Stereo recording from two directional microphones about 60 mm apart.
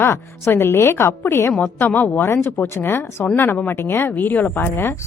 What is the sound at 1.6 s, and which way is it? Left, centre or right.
Speech, left.